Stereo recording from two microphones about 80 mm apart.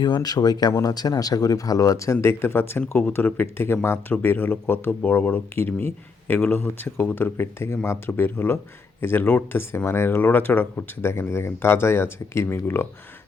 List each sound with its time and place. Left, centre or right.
0.0 s speech: left
0.7 s speech: left